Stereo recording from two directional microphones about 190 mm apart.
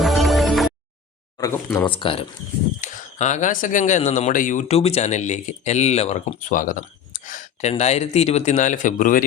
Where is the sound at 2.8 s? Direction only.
40° left (ahead or behind).